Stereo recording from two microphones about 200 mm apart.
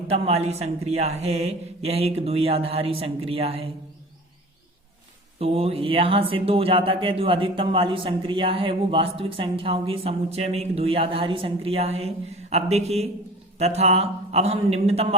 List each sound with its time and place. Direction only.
0.1 s speech: 30° right (ahead or behind)
5.4 s speech: 30° right (ahead or behind)